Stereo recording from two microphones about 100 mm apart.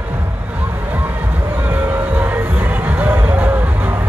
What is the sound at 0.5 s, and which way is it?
Music, 15° right (ahead or behind).